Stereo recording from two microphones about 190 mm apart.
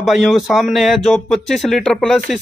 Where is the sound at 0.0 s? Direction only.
Centre (ahead or behind).